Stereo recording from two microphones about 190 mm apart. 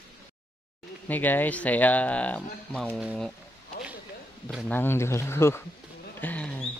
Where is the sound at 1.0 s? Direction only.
10° left (ahead or behind).